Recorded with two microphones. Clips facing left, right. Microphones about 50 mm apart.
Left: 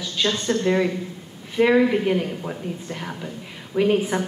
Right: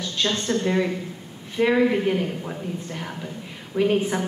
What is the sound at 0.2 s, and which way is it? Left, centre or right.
A woman's voice, centre.